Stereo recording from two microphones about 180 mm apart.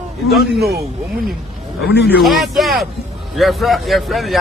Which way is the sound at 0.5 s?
60° right (ahead or behind).